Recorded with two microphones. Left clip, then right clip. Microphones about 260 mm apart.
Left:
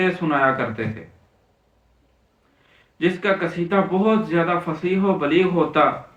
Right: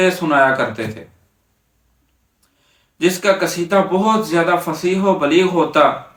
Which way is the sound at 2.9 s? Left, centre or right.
Centre.